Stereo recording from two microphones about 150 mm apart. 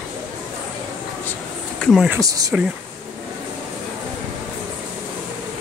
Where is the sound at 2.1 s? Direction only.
20° right (ahead or behind).